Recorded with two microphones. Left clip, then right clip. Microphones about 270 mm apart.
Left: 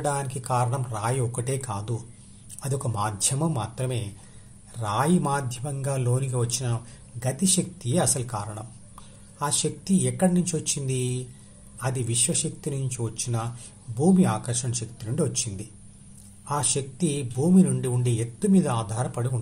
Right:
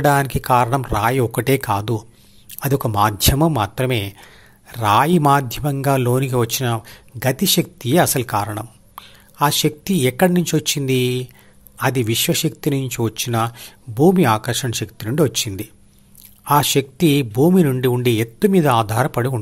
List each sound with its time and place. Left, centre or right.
0.0 s a man's voice: right